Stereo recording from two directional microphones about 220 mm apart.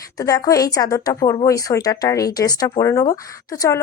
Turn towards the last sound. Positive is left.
turn(degrees=15)  # may be behind; listen again after turning